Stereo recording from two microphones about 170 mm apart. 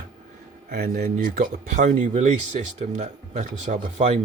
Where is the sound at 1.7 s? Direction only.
45° right (ahead or behind).